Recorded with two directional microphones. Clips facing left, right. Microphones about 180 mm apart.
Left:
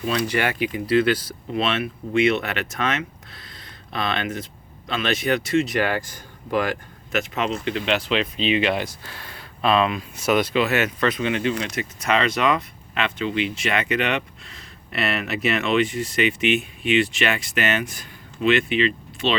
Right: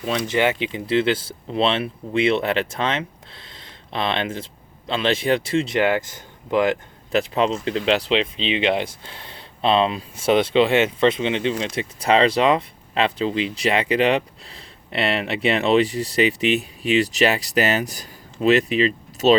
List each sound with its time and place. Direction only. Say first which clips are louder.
0.3 s speech: right 3 dB; 20° right (ahead or behind); by 19.4 s 40° right (ahead or behind)